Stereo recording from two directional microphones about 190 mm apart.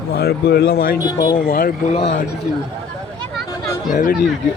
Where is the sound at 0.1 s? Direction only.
55° left (ahead or behind).